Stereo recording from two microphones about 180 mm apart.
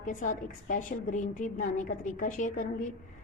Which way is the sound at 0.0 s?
45° left (ahead or behind).